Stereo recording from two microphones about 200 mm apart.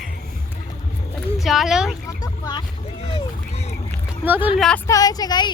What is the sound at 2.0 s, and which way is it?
Vehicle, 20° left (ahead or behind).